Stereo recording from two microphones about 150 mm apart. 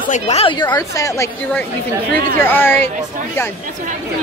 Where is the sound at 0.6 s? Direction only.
25° left (ahead or behind).